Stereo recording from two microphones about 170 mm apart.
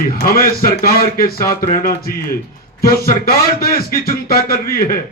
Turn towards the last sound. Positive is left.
turn(degrees=60)  # may be behind; listen again after turning